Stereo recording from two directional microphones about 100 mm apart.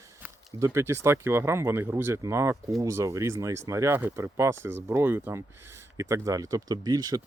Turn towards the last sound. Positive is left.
turn(degrees=-40)  # may be behind; listen again after turning